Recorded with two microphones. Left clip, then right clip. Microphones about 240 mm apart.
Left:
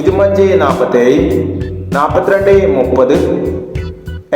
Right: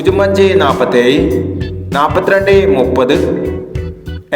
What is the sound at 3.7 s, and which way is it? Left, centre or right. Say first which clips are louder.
Music: even; centre.